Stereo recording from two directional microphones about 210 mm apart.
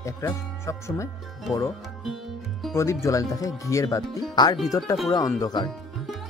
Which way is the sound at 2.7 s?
15° left (ahead or behind).